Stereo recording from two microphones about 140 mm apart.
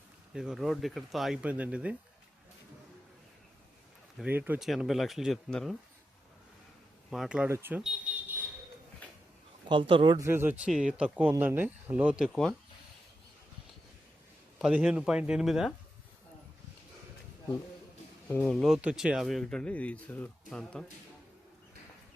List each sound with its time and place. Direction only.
0.3 s speech: 5° right (ahead or behind)
4.2 s speech: 15° right (ahead or behind)
4.6 s speech: centre (ahead or behind)
7.1 s speech: 5° right (ahead or behind)
7.4 s speech: 15° right (ahead or behind)
7.8 s a sound: 10° right (ahead or behind)
9.6 s speech: 40° right (ahead or behind)
10.2 s speech: 15° right (ahead or behind); by 12.5 s centre (ahead or behind)
14.6 s speech: 5° right (ahead or behind)
18.3 s speech: 5° left (ahead or behind)